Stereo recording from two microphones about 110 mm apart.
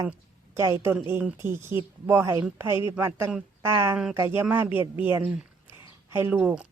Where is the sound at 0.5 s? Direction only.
25° right (ahead or behind).